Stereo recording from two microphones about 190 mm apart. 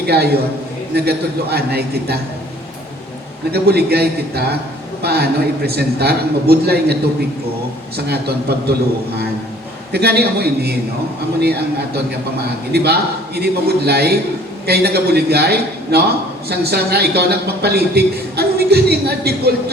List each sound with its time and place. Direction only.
0.0 s a man's voice: 55° right (ahead or behind)
3.5 s a man's voice: 55° right (ahead or behind)
9.9 s a man's voice: 55° right (ahead or behind)